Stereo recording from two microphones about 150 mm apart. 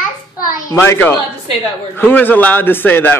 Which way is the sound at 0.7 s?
15° left (ahead or behind).